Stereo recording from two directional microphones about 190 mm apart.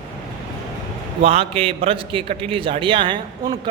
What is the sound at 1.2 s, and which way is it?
A man's voice, 30° right (ahead or behind).